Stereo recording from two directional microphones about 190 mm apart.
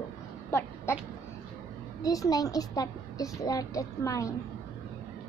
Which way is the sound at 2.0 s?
20° left (ahead or behind).